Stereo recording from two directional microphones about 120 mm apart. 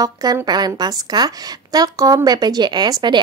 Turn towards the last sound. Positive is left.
turn(degrees=-40)  # may be behind; listen again after turning